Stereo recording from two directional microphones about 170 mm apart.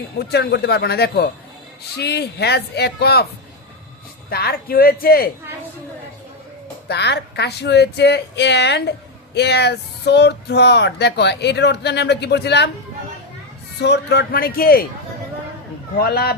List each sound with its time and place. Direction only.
0.2 s a man's voice: 75° left (ahead or behind)
4.3 s a man's voice: 65° left (ahead or behind)
6.8 s speech: 80° left
13.7 s a man's voice: 80° left; by 14.8 s 60° left (ahead or behind)
16.0 s a man's voice: 65° left (ahead or behind)